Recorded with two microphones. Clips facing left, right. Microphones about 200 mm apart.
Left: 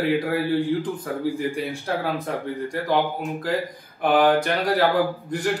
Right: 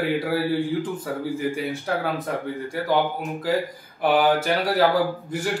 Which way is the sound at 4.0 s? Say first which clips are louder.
Left 1 dB; 5° right (ahead or behind).